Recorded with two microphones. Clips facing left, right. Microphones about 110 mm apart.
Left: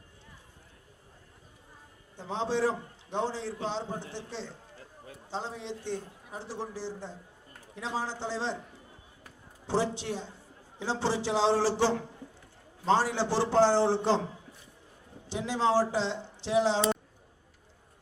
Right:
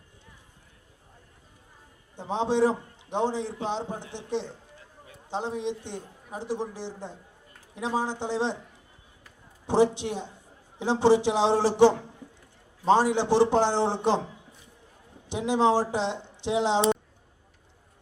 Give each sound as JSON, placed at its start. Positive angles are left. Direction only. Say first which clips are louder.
{"t": 2.1, "sound": "a man's voice", "louder": "right 5 dB", "side_deg": -20}
{"t": 9.6, "sound": "a man's voice", "louder": "right 7 dB", "side_deg": -20}
{"t": 12.2, "sound": "a sound", "louder": "even", "side_deg": -15}
{"t": 12.8, "sound": "speech", "louder": "right 5 dB", "side_deg": -20}
{"t": 15.3, "sound": "speech", "louder": "right 4 dB", "side_deg": -20}